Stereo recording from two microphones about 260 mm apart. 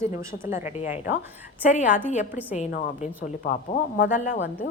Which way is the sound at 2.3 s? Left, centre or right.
Centre.